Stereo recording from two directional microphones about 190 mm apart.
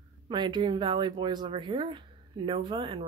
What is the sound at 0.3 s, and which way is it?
Speech, 25° right (ahead or behind).